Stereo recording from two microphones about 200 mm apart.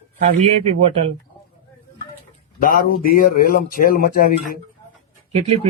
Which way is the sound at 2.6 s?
45° left (ahead or behind).